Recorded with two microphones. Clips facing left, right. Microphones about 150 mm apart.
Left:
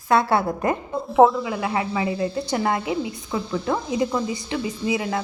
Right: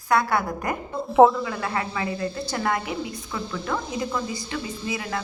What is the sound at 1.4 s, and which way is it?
A woman's voice, 20° left (ahead or behind).